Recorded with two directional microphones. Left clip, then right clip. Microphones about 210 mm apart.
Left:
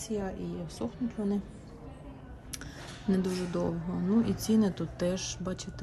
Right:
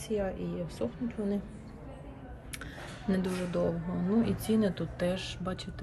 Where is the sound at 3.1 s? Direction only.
15° left (ahead or behind).